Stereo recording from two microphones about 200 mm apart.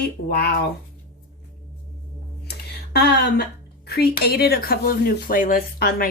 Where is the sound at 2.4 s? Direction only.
55° left (ahead or behind).